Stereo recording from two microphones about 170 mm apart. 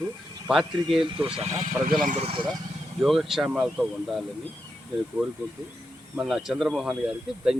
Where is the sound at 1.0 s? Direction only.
30° right (ahead or behind).